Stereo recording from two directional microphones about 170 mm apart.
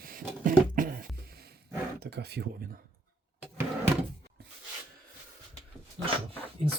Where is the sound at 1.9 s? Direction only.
75° right (ahead or behind).